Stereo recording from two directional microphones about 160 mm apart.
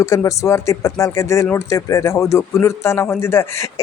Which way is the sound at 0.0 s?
20° left (ahead or behind).